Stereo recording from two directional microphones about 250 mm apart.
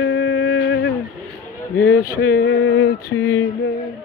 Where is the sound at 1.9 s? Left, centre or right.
Left.